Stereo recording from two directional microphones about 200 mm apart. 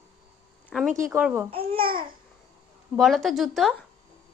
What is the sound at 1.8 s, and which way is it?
Babbling, 45° right (ahead or behind).